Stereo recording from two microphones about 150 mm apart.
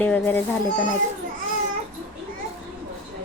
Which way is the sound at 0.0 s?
10° left (ahead or behind).